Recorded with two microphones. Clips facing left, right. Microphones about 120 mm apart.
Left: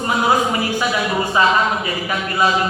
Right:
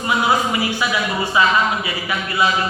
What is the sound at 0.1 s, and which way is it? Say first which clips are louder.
Speech: left 1 dB; 40° left (ahead or behind).